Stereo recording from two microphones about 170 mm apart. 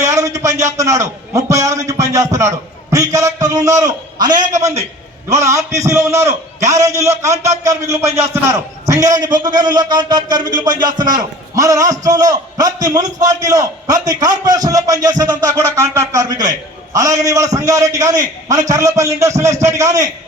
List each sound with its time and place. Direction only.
0.0 s a sound: 20° right (ahead or behind)
1.9 s a man's voice: 20° right (ahead or behind)
4.4 s a man's voice: 50° right (ahead or behind)
5.3 s a man's voice: 20° right (ahead or behind)